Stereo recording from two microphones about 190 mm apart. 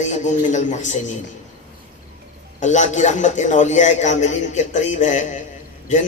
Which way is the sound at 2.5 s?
40° left (ahead or behind).